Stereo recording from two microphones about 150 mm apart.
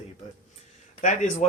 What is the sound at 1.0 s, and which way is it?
Speech, 55° left (ahead or behind).